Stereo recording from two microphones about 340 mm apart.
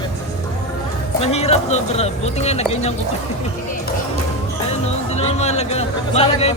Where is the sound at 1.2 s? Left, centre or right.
Centre.